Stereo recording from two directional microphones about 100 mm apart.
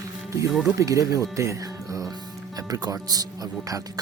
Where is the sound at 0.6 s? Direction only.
35° right (ahead or behind).